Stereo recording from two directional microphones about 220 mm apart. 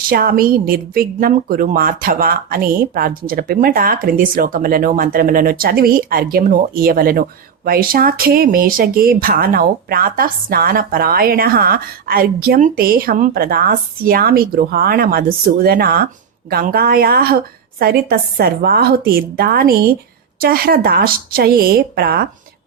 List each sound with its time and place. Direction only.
0.1 s a woman's voice: 40° right (ahead or behind)